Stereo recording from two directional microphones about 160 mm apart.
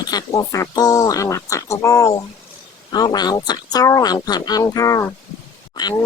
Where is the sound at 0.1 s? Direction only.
25° left (ahead or behind).